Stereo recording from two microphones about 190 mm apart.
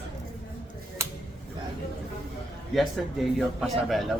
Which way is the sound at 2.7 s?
Centre (ahead or behind).